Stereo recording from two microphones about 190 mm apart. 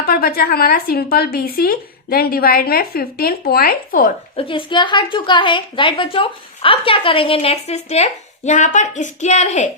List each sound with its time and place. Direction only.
0.0 s speech: 50° left (ahead or behind)
4.4 s a woman's voice: 25° left (ahead or behind)